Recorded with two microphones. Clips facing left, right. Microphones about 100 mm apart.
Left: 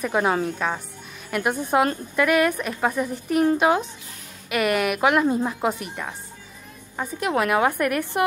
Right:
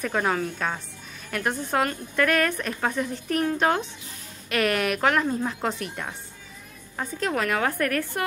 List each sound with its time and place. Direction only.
0.0 s a woman's voice: 15° left (ahead or behind)